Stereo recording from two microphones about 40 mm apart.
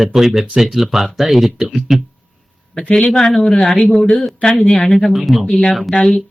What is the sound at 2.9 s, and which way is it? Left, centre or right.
Speech, centre.